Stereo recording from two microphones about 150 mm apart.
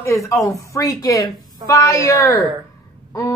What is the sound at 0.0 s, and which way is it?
Speech, 20° left (ahead or behind).